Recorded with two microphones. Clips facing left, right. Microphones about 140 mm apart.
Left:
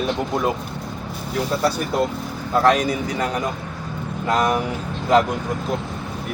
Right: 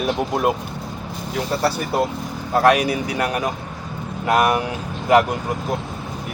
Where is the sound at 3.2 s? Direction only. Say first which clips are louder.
Right 1 dB; 70° right (ahead or behind).